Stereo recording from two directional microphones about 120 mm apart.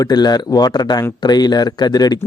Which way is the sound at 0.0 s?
35° left (ahead or behind).